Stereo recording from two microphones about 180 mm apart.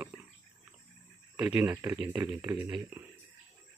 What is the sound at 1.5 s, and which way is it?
Speech, 15° right (ahead or behind).